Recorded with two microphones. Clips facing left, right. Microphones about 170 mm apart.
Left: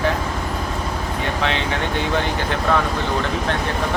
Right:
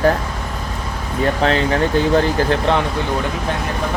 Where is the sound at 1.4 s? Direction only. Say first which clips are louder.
Right 6 dB; 40° right (ahead or behind).